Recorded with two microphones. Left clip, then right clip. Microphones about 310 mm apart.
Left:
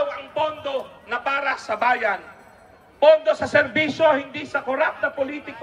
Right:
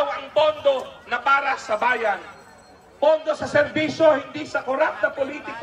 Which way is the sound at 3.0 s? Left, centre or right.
Left.